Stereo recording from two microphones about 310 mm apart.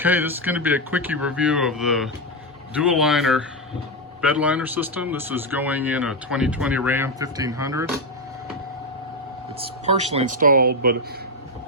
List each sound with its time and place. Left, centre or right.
0.0 s speech: centre
10.2 s speech: right